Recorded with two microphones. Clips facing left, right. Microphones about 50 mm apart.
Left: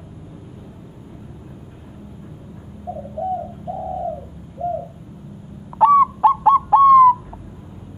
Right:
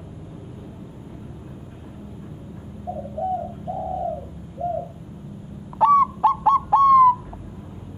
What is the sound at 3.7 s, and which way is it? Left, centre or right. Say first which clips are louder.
Bird: left 1 dB; centre.